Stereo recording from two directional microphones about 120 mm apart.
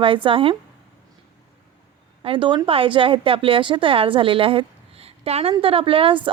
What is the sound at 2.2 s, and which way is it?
Speech, 45° right (ahead or behind).